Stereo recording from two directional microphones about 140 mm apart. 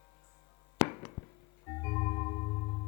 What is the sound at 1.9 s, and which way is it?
Music, 25° left (ahead or behind).